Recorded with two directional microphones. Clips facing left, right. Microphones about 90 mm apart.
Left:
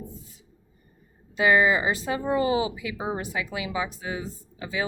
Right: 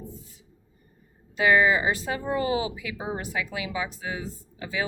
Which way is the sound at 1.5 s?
20° left (ahead or behind).